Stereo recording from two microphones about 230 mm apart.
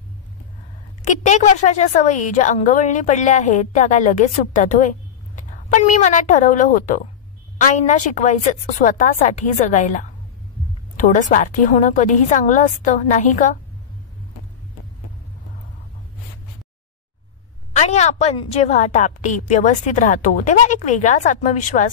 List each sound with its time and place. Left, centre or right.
1.0 s a woman's voice: left
17.7 s a woman's voice: left